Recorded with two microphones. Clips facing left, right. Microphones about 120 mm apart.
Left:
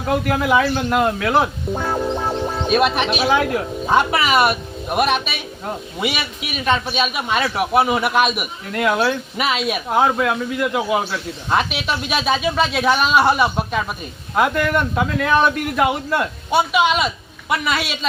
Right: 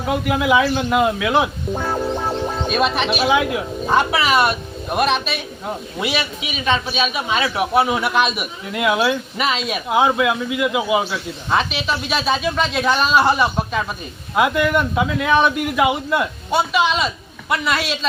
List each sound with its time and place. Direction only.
0.1 s speech: 5° right (ahead or behind)
2.7 s speech: 5° left (ahead or behind)
8.7 s speech: 5° right (ahead or behind)